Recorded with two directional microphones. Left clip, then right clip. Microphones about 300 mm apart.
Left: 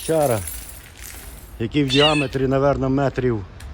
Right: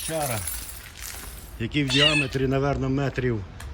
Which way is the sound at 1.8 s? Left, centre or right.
Centre.